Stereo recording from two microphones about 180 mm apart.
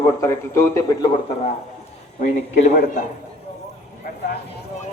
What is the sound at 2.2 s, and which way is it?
Speech, 45° left (ahead or behind).